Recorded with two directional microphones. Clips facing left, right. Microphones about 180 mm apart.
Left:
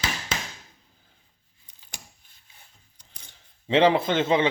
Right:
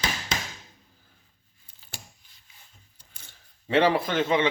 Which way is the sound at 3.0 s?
20° left (ahead or behind).